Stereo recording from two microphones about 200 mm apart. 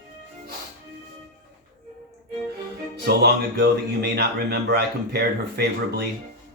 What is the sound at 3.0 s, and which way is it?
Speech, 55° right (ahead or behind).